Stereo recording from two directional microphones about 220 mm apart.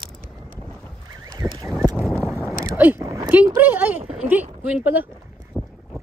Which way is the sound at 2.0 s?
Centre (ahead or behind).